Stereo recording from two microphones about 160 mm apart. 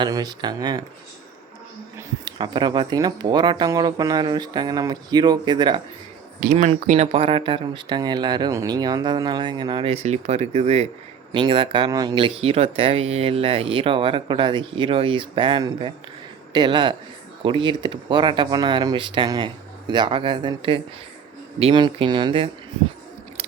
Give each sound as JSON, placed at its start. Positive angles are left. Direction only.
{"t": 0.0, "sound": "speech", "side_deg": -25}
{"t": 2.0, "sound": "speech", "side_deg": -25}
{"t": 6.4, "sound": "speech", "side_deg": -55}
{"t": 6.8, "sound": "speech", "side_deg": -45}